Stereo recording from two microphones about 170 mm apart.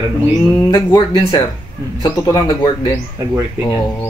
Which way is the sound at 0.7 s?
20° left (ahead or behind).